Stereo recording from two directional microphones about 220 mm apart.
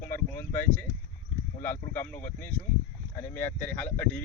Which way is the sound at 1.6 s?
10° left (ahead or behind).